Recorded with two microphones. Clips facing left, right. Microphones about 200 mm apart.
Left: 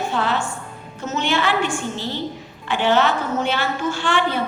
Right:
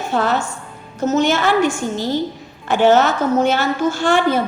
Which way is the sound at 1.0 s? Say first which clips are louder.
Right 6 dB; 40° right (ahead or behind).